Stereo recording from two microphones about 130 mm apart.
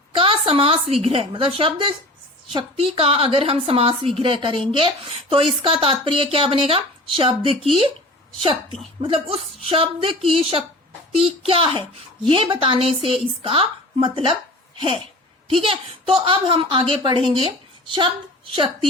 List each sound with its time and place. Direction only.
0.1 s a sound: 45° right (ahead or behind)
1.0 s speech: 45° right (ahead or behind)
15.4 s a woman's voice: 45° right (ahead or behind)